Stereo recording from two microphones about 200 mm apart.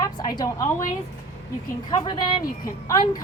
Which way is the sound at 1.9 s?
20° left (ahead or behind).